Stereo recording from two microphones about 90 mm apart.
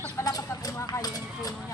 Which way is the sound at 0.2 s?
40° left (ahead or behind).